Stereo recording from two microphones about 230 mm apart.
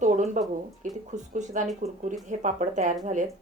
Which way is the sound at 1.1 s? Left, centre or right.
Right.